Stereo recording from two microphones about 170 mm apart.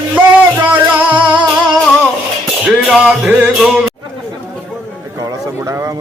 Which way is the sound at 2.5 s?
Centre (ahead or behind).